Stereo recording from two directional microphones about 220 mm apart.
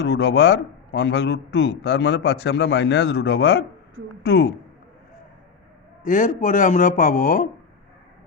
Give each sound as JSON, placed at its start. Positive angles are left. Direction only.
{"t": 0.0, "sound": "a man's voice", "side_deg": 50}
{"t": 6.0, "sound": "a man's voice", "side_deg": 35}